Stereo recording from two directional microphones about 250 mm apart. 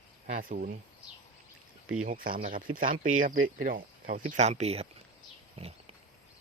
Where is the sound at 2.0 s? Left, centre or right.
Right.